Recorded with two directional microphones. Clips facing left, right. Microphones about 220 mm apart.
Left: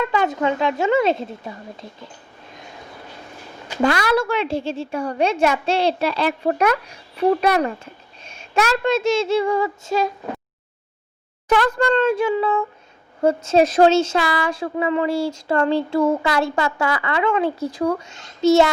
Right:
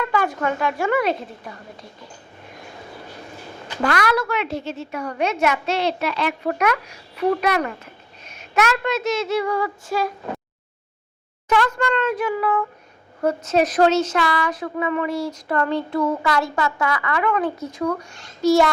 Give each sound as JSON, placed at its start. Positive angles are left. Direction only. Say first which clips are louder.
{"t": 0.0, "sound": "speech", "louder": "left 2 dB", "side_deg": 20}
{"t": 3.8, "sound": "a woman's voice", "louder": "left 3 dB", "side_deg": 25}
{"t": 11.4, "sound": "speech", "louder": "left 3 dB", "side_deg": 35}